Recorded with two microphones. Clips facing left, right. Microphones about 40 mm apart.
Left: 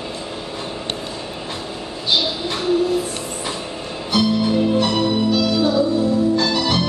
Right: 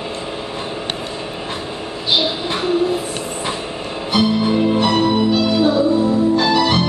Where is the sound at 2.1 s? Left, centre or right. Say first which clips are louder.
Right 3 dB; right.